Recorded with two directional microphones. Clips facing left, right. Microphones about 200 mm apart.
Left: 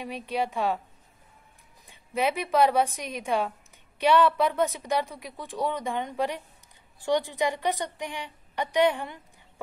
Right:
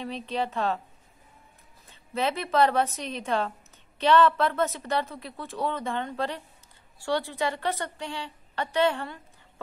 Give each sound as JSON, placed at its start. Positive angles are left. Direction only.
{"t": 0.0, "sound": "a woman's voice", "side_deg": 10}
{"t": 1.9, "sound": "a woman's voice", "side_deg": 10}